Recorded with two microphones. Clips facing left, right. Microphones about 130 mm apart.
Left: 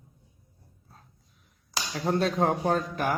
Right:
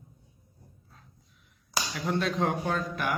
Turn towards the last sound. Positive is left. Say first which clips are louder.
# left 4 dB
turn(degrees=35)  # may be behind; listen again after turning